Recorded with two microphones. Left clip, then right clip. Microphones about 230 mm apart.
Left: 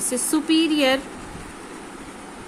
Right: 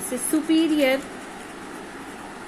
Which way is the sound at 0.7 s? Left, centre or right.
Left.